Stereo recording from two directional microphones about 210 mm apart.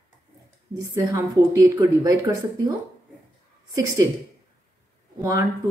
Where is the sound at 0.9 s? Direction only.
15° right (ahead or behind).